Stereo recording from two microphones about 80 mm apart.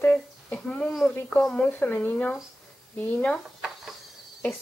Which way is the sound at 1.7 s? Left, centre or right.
Left.